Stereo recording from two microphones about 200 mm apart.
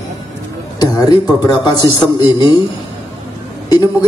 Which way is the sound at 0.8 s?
20° left (ahead or behind).